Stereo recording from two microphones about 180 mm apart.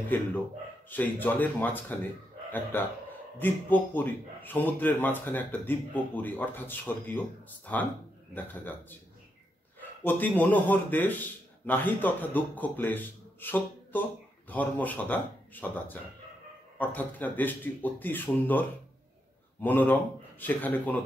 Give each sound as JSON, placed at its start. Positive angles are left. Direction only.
{"t": 0.1, "sound": "speech", "side_deg": 10}
{"t": 9.8, "sound": "a man's voice", "side_deg": 10}